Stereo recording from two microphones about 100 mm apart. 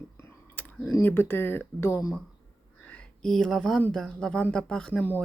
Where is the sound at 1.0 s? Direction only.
20° left (ahead or behind).